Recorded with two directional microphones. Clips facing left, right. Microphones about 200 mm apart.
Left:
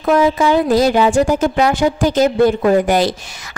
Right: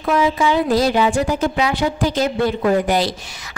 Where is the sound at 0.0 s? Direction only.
45° left (ahead or behind).